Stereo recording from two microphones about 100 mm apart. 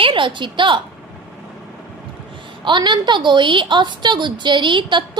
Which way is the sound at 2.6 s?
50° right (ahead or behind).